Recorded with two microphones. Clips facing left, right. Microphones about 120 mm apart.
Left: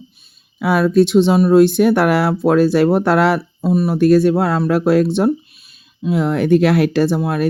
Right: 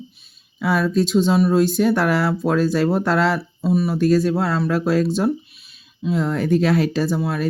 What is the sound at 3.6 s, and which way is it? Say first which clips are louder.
Speech: left 3 dB; 45° left (ahead or behind).